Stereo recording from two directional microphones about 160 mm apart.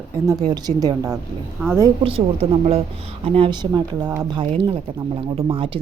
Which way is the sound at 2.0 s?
35° right (ahead or behind).